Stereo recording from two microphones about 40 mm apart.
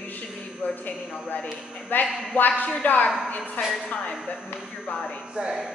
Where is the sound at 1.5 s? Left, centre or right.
Centre.